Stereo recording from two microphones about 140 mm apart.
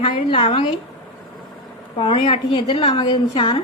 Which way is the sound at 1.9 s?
40° left (ahead or behind).